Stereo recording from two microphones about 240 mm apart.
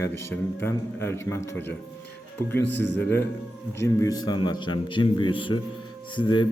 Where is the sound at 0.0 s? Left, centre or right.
Centre.